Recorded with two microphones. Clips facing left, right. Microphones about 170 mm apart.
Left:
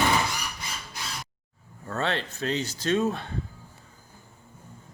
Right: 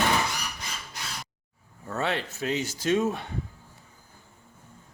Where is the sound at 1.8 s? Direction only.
10° right (ahead or behind).